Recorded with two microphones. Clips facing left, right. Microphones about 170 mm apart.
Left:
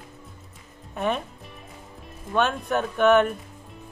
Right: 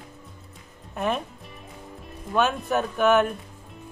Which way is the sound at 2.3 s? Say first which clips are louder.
Even; 5° right (ahead or behind).